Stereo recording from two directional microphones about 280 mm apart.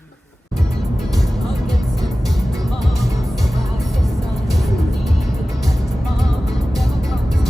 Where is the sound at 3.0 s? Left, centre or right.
Centre.